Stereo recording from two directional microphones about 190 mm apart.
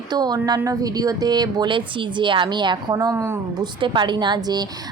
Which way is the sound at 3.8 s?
25° right (ahead or behind).